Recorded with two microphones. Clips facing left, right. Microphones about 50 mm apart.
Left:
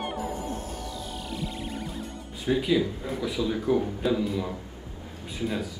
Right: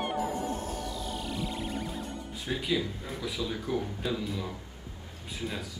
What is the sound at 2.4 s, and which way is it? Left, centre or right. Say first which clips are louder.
A man's voice: left 7 dB; centre.